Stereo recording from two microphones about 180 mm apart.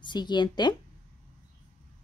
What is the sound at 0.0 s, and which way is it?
Speech, 25° left (ahead or behind).